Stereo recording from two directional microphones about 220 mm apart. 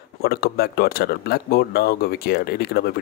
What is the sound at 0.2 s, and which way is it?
Speech, 45° left (ahead or behind).